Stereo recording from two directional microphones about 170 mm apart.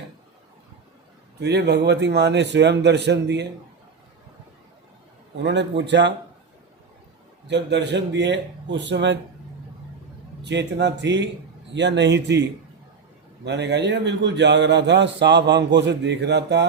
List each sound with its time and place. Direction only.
1.4 s a man's voice: 80° right
5.4 s a man's voice: 90° right
7.4 s a man's voice: 90° right
10.4 s a man's voice: 90° right